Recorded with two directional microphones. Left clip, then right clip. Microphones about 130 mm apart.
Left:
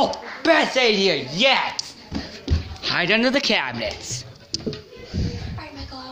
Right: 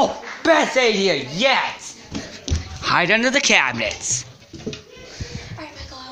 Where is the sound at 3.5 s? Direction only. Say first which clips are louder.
Right 6 dB; 5° right (ahead or behind).